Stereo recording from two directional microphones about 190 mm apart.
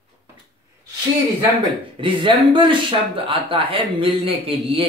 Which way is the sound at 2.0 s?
25° right (ahead or behind).